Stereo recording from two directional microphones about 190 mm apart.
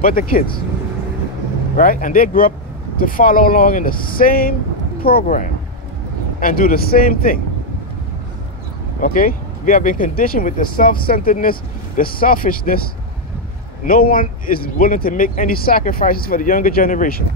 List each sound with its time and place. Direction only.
0.0 s speech: 50° left (ahead or behind)
1.8 s speech: 45° left (ahead or behind)
9.0 s speech: 45° left (ahead or behind)
13.8 s speech: 50° left (ahead or behind)